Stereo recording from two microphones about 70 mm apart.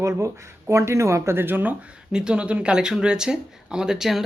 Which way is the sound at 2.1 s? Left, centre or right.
Centre.